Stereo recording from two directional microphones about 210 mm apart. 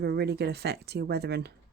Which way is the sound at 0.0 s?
50° right (ahead or behind).